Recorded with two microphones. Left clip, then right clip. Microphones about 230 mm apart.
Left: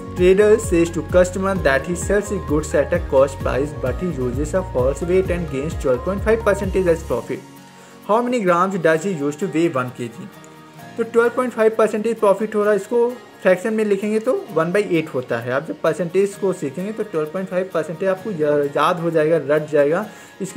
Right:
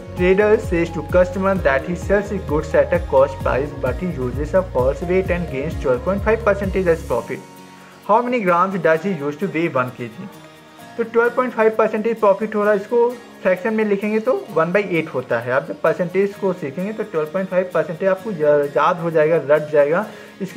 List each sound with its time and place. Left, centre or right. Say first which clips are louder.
0.2 s speech: left 1 dB; left
11.1 s speech: even; left